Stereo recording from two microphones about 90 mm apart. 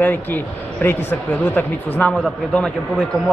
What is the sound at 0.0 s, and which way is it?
A man's voice, 20° left (ahead or behind).